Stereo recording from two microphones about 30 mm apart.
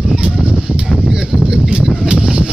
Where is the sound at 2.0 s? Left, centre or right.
Right.